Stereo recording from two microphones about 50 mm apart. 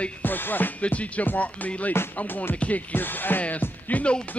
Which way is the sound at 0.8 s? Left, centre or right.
Left.